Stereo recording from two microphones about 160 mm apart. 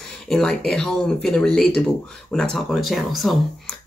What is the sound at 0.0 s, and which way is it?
Speech, 5° left (ahead or behind).